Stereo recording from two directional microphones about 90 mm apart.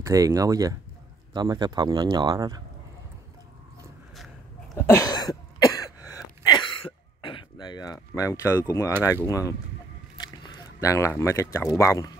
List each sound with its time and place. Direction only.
0.0 s speech: 35° right (ahead or behind)
1.3 s a man's voice: 50° right (ahead or behind)
4.7 s cough: 35° left (ahead or behind)
6.8 s throat clearing: 70° left (ahead or behind); by 8.0 s 50° left (ahead or behind)
8.1 s speech: 35° left (ahead or behind)
10.1 s squish: 55° left (ahead or behind)
10.8 s speech: 35° left (ahead or behind)